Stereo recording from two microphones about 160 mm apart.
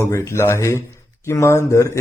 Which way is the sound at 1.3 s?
20° left (ahead or behind).